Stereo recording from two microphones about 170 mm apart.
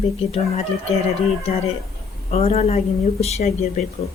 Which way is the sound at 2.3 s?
35° left (ahead or behind).